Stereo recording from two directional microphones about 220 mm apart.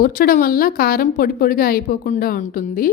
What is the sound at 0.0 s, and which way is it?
A woman's voice, 40° left (ahead or behind).